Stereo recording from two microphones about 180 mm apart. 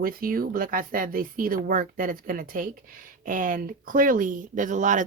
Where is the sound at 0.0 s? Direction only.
55° right (ahead or behind).